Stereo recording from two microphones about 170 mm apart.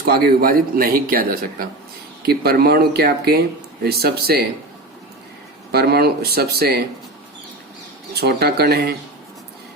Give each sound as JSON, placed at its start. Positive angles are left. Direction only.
{"t": 0.0, "sound": "speech", "side_deg": -65}
{"t": 5.7, "sound": "speech", "side_deg": -65}
{"t": 8.1, "sound": "speech", "side_deg": -70}